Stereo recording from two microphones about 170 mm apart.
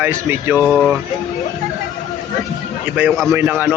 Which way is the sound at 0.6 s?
Centre (ahead or behind).